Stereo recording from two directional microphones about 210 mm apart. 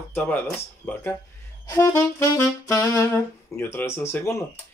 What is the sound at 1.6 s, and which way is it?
Saxophone, 15° left (ahead or behind).